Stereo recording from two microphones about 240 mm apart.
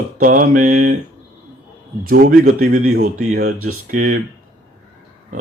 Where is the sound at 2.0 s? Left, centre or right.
Right.